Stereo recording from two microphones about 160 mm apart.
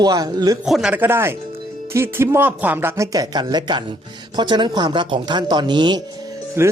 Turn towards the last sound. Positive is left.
turn(degrees=-15)  # may be behind; listen again after turning